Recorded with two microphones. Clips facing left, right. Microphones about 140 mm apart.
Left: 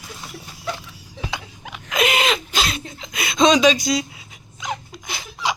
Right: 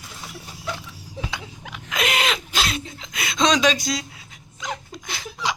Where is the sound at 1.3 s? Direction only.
5° left (ahead or behind).